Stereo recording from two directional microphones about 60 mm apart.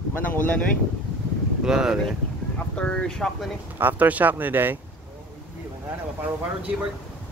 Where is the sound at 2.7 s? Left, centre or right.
Centre.